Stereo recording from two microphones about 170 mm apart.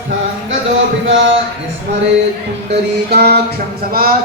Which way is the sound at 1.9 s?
65° right (ahead or behind).